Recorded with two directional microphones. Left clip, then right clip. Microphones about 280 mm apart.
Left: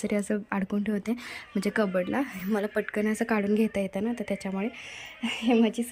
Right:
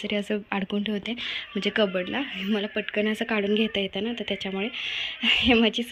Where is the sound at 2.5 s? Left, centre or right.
Left.